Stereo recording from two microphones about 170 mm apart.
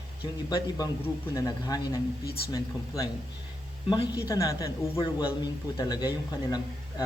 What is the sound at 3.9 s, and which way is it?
A man's voice, 20° left (ahead or behind).